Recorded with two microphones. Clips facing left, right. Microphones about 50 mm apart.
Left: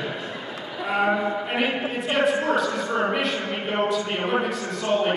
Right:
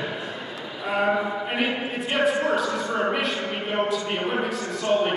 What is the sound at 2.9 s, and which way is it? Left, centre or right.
A man's voice, centre.